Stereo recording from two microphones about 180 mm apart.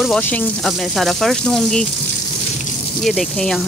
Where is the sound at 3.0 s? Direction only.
5° left (ahead or behind).